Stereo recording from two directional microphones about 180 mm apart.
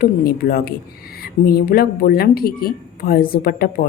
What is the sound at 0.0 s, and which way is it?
Speech, 55° left (ahead or behind).